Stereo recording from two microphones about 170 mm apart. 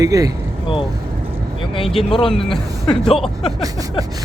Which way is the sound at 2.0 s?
30° left (ahead or behind).